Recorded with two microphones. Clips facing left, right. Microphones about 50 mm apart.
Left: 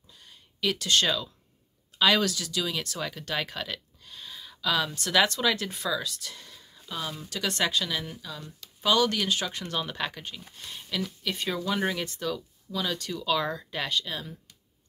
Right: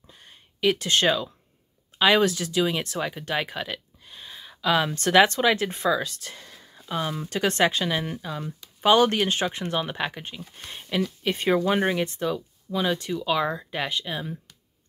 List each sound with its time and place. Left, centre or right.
0.1 s a sound: right
2.0 s speech: right
11.8 s speech: right